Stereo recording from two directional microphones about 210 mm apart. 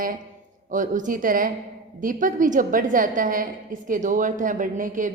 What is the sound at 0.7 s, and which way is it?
A woman's voice, 40° right (ahead or behind).